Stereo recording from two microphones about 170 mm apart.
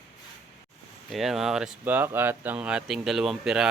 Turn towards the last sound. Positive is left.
turn(degrees=-5)  # may be behind; listen again after turning